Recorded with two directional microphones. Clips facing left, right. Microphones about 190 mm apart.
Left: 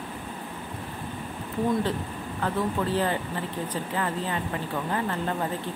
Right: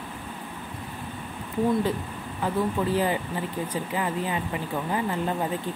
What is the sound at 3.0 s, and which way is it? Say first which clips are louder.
Speech: right 1 dB; 10° right (ahead or behind).